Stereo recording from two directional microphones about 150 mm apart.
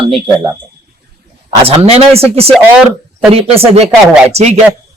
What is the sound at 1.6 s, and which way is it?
Speech, 40° right (ahead or behind).